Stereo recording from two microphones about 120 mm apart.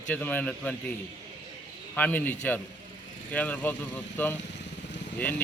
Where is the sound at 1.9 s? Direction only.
15° left (ahead or behind).